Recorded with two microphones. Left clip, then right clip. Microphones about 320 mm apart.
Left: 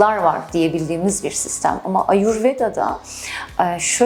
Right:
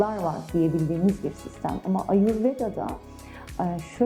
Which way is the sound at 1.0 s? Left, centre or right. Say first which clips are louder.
Left 6 dB; left.